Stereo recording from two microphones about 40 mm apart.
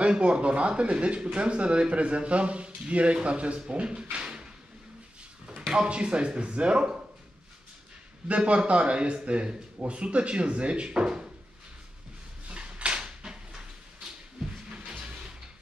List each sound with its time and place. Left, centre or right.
0.0 s speech: right
5.7 s speech: right
8.3 s speech: right
12.4 s dishes: right
14.7 s a sound: right